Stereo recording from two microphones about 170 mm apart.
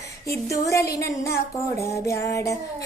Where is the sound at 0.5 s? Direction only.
20° left (ahead or behind).